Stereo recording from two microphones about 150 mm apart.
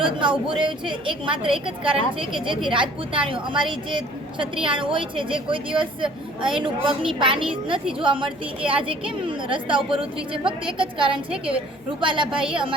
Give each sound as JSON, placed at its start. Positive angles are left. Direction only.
{"t": 0.0, "sound": "a woman's voice", "side_deg": -35}